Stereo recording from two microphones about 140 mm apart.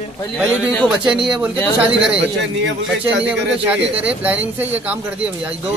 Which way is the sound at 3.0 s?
10° right (ahead or behind).